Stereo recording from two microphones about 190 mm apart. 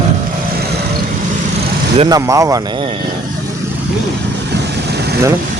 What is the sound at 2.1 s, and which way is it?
Speech, 15° right (ahead or behind).